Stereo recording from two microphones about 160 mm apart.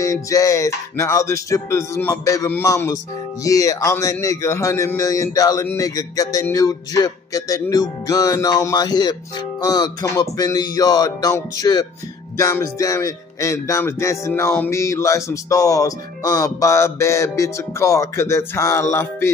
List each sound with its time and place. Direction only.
0.0 s music: 20° left (ahead or behind)